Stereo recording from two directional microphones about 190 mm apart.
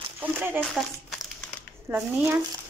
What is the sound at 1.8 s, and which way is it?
Speech, 15° right (ahead or behind).